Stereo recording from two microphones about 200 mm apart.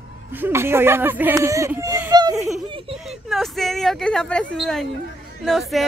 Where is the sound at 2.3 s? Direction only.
Centre (ahead or behind).